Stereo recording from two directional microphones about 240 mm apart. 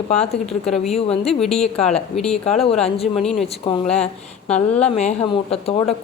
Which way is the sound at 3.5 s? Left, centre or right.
Left.